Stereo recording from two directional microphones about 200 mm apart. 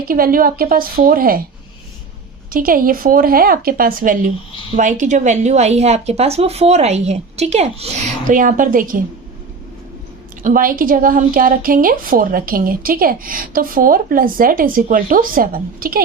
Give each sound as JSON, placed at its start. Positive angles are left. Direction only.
{"t": 0.1, "sound": "a woman's voice", "side_deg": -45}
{"t": 2.5, "sound": "a woman's voice", "side_deg": -45}
{"t": 10.4, "sound": "a woman's voice", "side_deg": -45}